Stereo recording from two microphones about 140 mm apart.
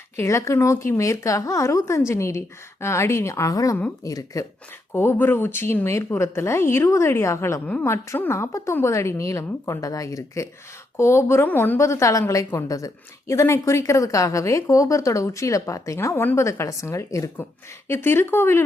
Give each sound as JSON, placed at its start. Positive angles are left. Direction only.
{"t": 0.2, "sound": "a woman's voice", "side_deg": 20}
{"t": 4.9, "sound": "a woman's voice", "side_deg": 15}